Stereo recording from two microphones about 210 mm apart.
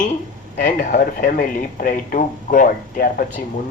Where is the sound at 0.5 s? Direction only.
40° left (ahead or behind).